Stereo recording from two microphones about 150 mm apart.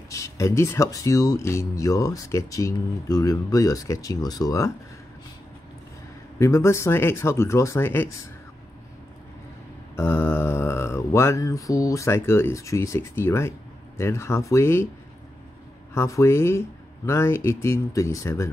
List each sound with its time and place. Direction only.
0.1 s speech: 20° left (ahead or behind)
6.4 s speech: 20° left (ahead or behind)
9.9 s speech: 15° left (ahead or behind)
15.9 s speech: 20° left (ahead or behind)